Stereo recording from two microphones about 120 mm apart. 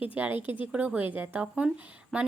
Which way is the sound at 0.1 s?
15° right (ahead or behind).